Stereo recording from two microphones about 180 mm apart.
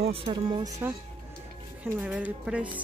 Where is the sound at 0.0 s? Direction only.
30° right (ahead or behind).